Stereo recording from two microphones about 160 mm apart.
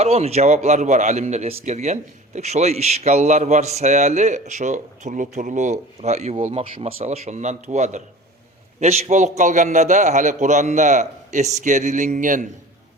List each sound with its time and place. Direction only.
0.0 s speech: 40° right (ahead or behind)